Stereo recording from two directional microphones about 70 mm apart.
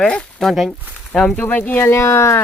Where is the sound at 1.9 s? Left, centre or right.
Left.